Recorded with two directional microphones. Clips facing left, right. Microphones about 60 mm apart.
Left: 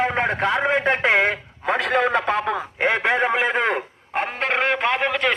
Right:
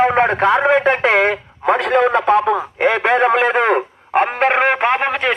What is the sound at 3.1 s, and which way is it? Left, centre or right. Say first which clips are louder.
A man's voice: right 6 dB; right.